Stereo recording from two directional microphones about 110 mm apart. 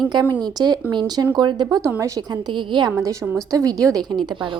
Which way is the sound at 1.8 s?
30° right (ahead or behind).